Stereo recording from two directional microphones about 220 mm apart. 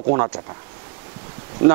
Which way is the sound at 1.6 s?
45° right (ahead or behind).